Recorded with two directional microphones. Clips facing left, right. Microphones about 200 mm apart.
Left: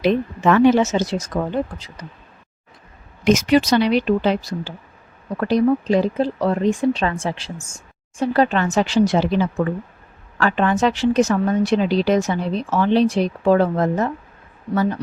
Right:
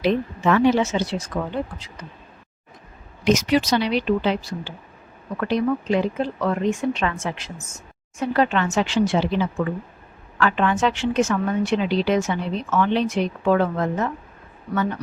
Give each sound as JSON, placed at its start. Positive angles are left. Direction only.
{"t": 0.0, "sound": "speech", "side_deg": 55}
{"t": 3.2, "sound": "a woman's voice", "side_deg": 50}